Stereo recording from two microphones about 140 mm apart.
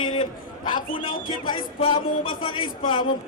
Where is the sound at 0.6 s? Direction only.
75° left (ahead or behind).